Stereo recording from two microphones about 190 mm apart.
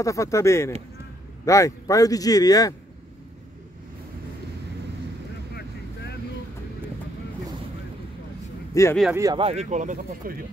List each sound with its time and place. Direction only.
0.0 s a man's voice: 15° left (ahead or behind)
5.5 s vehicle: 60° left (ahead or behind)
8.8 s speech: 15° left (ahead or behind)
9.1 s speech: 20° right (ahead or behind)
9.4 s speech: 35° right (ahead or behind)